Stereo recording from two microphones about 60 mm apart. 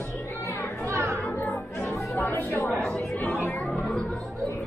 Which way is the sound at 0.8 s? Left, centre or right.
Right.